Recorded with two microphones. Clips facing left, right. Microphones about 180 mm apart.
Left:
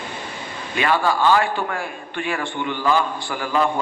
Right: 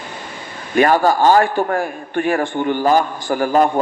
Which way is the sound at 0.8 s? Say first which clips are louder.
Right 6 dB; 45° right (ahead or behind).